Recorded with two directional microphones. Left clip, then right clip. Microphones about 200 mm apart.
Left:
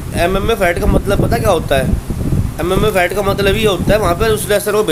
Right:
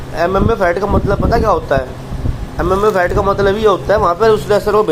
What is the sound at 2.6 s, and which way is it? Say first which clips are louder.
Speech: right 1 dB; 25° left (ahead or behind).